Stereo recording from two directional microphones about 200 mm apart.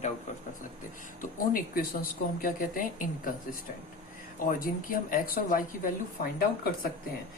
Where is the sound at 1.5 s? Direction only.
45° left (ahead or behind).